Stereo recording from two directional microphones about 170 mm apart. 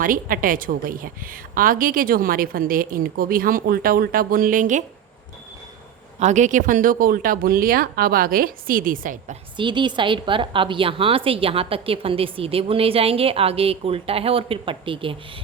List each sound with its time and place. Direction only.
0.0 s a woman's voice: 55° right (ahead or behind)
6.1 s a woman's voice: 45° right (ahead or behind)
9.6 s a woman's voice: 25° right (ahead or behind)